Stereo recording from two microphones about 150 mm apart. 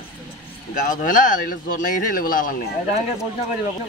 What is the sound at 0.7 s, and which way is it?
Speech, 60° left (ahead or behind).